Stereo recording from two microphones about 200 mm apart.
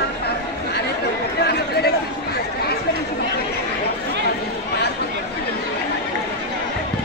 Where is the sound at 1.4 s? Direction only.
55° left (ahead or behind).